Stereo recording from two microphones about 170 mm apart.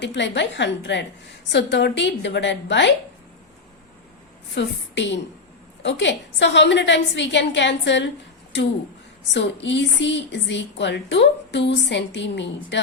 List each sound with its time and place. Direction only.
0.0 s a woman's voice: 90° left
4.5 s a woman's voice: 90° left
9.3 s a woman's voice: 90° left